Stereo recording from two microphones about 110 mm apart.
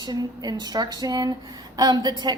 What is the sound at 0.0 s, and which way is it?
A woman's voice, 40° right (ahead or behind).